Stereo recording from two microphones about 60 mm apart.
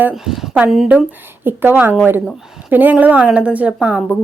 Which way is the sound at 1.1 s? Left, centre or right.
Right.